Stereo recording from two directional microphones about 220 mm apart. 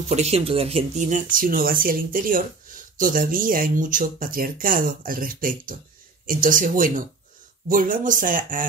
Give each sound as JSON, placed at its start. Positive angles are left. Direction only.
{"t": 0.1, "sound": "speech", "side_deg": -30}